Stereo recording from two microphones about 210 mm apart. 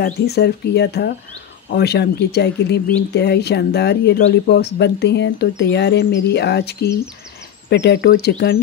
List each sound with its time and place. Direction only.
0.0 s speech: 50° left (ahead or behind)